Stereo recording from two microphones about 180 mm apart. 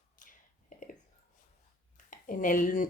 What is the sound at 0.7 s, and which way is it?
Whispering, 45° left (ahead or behind).